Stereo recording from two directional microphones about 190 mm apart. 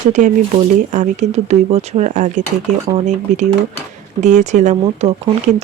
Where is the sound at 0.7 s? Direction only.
40° right (ahead or behind).